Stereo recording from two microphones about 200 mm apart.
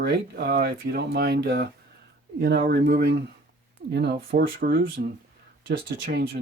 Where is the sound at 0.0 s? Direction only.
55° right (ahead or behind).